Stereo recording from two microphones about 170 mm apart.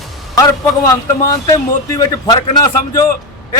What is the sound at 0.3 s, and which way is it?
A man's voice, 20° left (ahead or behind).